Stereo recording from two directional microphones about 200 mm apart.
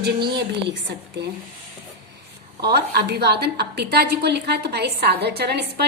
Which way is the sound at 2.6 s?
55° right (ahead or behind).